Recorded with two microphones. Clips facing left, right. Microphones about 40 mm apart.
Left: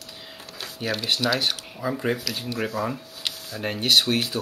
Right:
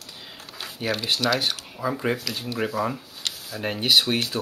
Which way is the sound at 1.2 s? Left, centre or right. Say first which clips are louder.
Even; centre.